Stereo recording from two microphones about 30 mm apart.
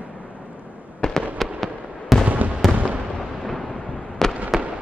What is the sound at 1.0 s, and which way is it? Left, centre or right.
Fireworks, left.